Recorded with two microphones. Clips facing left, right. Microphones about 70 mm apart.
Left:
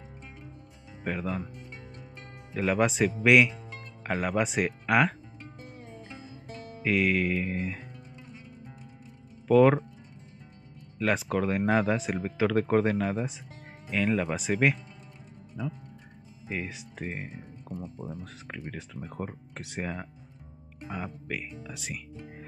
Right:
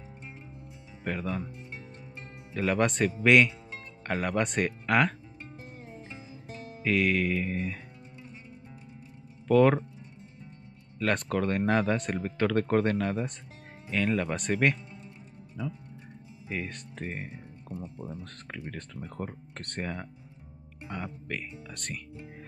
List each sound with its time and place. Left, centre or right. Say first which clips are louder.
1.0 s speech: left 1 dB; centre
2.5 s speech: left 1 dB; centre
6.8 s speech: even; centre
9.5 s speech: left 2 dB; centre
11.0 s speech: left 1 dB; centre